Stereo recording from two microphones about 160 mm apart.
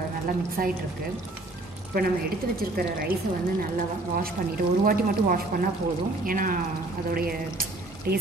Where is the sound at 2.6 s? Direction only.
70° right (ahead or behind).